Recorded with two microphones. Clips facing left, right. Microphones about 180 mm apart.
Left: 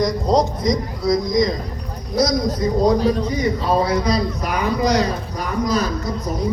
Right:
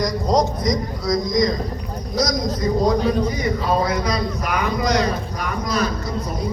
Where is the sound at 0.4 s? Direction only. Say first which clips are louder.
Left 1 dB; 25° left (ahead or behind).